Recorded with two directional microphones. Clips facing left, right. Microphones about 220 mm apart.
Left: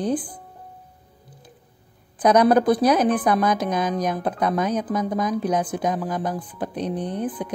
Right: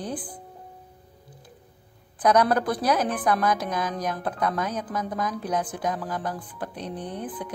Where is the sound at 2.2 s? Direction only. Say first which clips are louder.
Left 5 dB; 20° left (ahead or behind).